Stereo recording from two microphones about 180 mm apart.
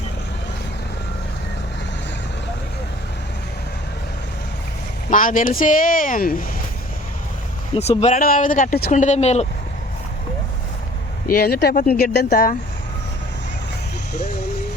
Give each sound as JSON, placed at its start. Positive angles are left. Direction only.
{"t": 5.1, "sound": "speech", "side_deg": 50}
{"t": 7.8, "sound": "speech", "side_deg": 35}
{"t": 8.2, "sound": "speech", "side_deg": 50}
{"t": 11.3, "sound": "speech", "side_deg": 55}